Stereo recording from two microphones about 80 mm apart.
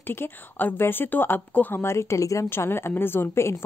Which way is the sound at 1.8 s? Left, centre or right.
Left.